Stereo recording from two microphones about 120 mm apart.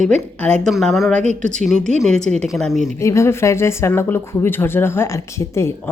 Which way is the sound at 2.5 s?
Centre (ahead or behind).